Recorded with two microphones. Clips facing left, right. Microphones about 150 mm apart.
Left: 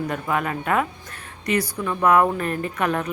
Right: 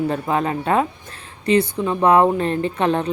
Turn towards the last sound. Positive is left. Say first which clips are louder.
# right 4 dB
turn(degrees=-30)  # may be behind; listen again after turning